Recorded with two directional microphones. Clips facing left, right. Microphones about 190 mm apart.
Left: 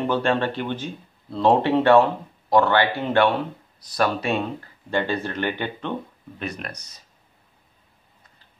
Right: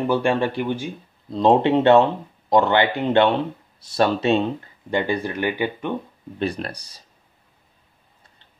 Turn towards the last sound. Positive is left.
turn(degrees=-30)  # may be behind; listen again after turning